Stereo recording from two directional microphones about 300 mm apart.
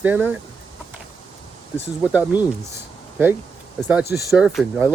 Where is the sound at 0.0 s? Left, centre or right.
Centre.